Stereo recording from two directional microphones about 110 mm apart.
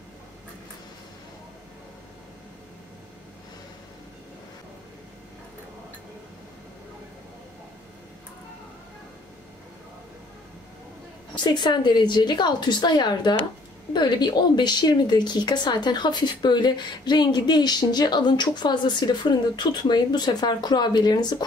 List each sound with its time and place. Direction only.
11.3 s speech: 40° left (ahead or behind)